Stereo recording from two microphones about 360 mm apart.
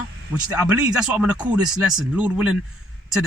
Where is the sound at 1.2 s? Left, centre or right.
Centre.